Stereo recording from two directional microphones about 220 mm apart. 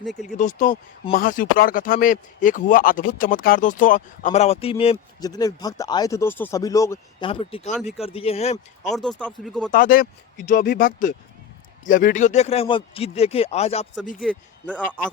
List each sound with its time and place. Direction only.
0.0 s speech: centre (ahead or behind)
0.3 s speech: 35° left (ahead or behind); by 7.3 s 15° left (ahead or behind)
7.3 s speech: 25° left (ahead or behind)
8.9 s speech: centre (ahead or behind)
9.7 s speech: 40° left (ahead or behind)
14.2 s speech: 5° left (ahead or behind)